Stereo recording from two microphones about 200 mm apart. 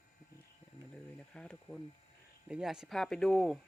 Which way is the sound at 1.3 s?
5° left (ahead or behind).